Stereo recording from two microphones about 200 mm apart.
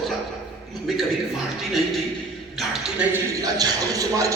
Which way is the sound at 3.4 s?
15° right (ahead or behind).